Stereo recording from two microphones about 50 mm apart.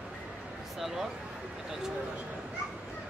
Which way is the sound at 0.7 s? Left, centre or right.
Centre.